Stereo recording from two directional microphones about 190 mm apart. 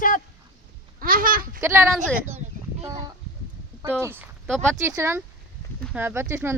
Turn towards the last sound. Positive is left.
turn(degrees=-15)  # may be behind; listen again after turning